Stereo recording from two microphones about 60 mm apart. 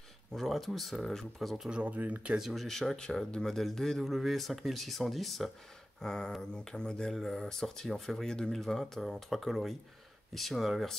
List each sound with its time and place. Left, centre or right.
0.3 s speech: centre
1.7 s speech: right
2.3 s speech: centre
5.9 s speech: centre